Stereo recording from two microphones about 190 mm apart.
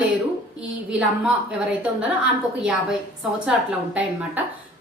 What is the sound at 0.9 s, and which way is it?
A woman's voice, 5° right (ahead or behind).